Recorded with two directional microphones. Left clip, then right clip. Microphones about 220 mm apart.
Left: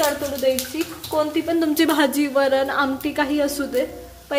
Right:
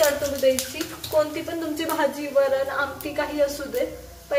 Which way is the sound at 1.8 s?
50° left (ahead or behind).